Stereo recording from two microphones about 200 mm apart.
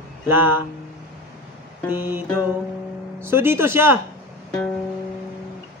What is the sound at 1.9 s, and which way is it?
Speech, 10° right (ahead or behind).